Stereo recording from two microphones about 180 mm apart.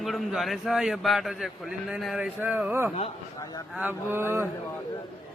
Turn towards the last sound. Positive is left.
turn(degrees=-15)  # may be behind; listen again after turning